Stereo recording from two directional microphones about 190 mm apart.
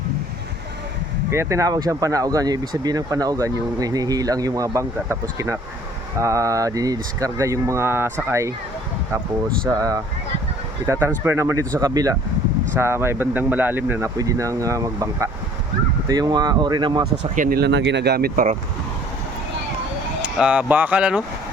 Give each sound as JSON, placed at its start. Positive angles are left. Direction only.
{"t": 1.3, "sound": "speech", "side_deg": -15}
{"t": 6.1, "sound": "speech", "side_deg": -15}
{"t": 9.6, "sound": "speech", "side_deg": -20}
{"t": 17.3, "sound": "speech", "side_deg": -50}
{"t": 20.2, "sound": "speech", "side_deg": -5}